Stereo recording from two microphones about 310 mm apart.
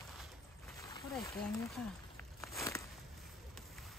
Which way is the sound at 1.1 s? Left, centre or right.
Centre.